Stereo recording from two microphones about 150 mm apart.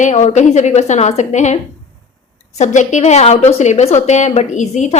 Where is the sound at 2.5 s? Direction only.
50° left (ahead or behind).